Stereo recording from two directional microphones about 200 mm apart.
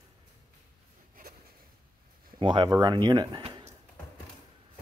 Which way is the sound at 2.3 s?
25° right (ahead or behind).